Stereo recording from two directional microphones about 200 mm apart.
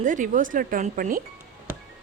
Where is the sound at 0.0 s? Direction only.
40° right (ahead or behind).